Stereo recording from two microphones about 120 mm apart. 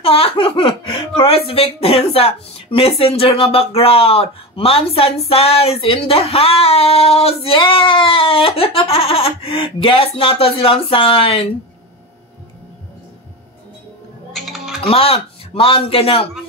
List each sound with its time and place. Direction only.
0.0 s giggle: 50° left (ahead or behind)
2.1 s speech: 55° left (ahead or behind)
14.3 s typing: centre (ahead or behind)
14.8 s speech: 55° left (ahead or behind)